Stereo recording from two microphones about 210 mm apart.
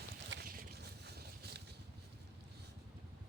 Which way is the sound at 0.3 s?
50° right (ahead or behind).